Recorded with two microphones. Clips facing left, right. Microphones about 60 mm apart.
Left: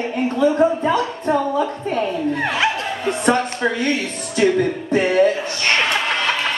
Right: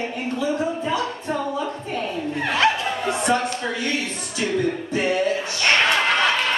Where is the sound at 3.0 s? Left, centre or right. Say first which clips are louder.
Left 4 dB; left.